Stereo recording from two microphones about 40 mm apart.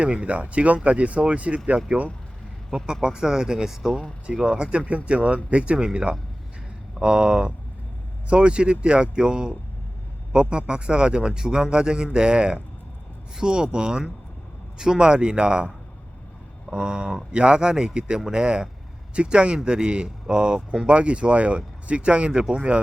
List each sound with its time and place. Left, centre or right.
0.0 s speech: right
2.6 s speech: centre
16.7 s speech: right
22.3 s speech: centre